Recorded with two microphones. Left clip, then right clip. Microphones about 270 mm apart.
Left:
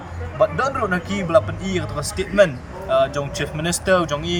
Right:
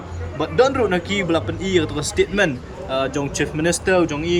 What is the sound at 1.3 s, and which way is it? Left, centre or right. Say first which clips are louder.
Speech: left 4 dB; centre.